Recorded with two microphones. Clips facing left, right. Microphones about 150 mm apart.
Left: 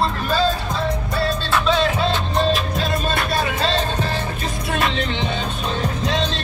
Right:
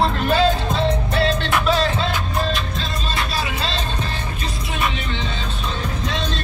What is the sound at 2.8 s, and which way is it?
Music, 50° left (ahead or behind).